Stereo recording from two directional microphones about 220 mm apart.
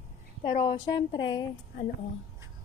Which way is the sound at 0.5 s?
20° left (ahead or behind).